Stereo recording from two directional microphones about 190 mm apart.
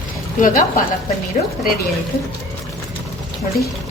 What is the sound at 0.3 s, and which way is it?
A woman's voice, 45° left (ahead or behind).